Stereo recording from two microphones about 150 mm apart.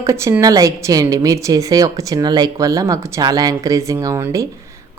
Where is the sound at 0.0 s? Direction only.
20° right (ahead or behind).